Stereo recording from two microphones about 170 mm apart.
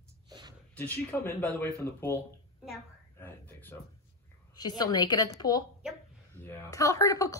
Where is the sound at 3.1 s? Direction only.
10° left (ahead or behind).